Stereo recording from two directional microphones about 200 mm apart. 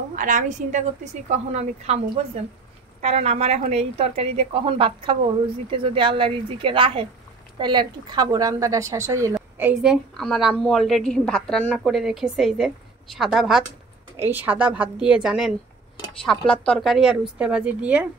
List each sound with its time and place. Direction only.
0.1 s a woman's voice: 40° right (ahead or behind); by 18.0 s 5° right (ahead or behind)